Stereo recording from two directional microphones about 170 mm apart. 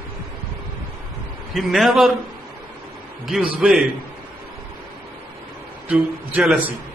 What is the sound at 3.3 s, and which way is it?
Speech, centre (ahead or behind).